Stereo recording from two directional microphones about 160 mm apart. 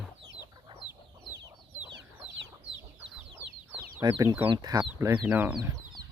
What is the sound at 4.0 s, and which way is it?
Speech, 20° right (ahead or behind).